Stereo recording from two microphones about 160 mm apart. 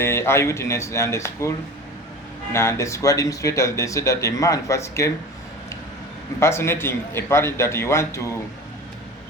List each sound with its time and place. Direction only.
0.0 s a man's voice: 15° left (ahead or behind)
6.4 s a man's voice: 15° left (ahead or behind)